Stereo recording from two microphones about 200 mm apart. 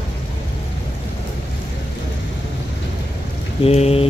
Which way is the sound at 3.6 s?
30° left (ahead or behind).